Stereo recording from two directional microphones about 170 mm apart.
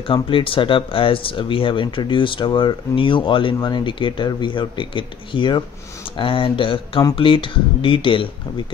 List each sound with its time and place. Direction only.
0.0 s speech: 30° left (ahead or behind)